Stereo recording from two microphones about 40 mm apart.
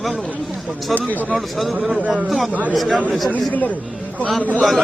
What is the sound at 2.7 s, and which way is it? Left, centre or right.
Speech, centre.